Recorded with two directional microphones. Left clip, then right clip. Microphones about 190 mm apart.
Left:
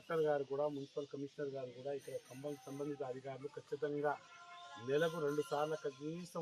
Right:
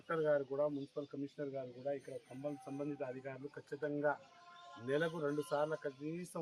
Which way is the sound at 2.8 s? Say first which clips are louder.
Even; 10° right (ahead or behind).